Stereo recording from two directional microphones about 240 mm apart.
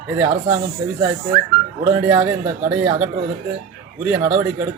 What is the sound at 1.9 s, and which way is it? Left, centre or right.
A man's voice, centre.